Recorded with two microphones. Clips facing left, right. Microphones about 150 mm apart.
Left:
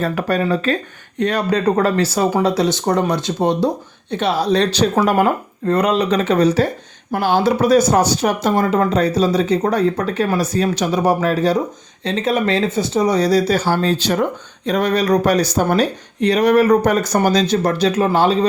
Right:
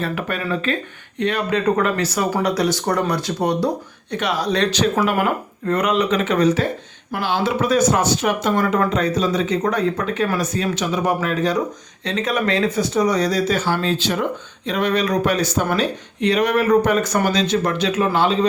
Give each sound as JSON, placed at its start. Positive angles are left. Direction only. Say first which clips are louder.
{"t": 0.0, "sound": "speech", "louder": "left 6 dB", "side_deg": 40}
{"t": 7.1, "sound": "speech", "louder": "left 5 dB", "side_deg": 45}